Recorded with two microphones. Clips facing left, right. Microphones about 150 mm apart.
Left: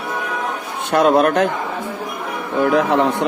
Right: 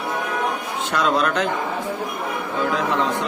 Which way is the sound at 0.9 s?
55° left (ahead or behind).